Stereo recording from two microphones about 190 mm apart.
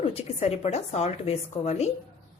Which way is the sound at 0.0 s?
30° left (ahead or behind).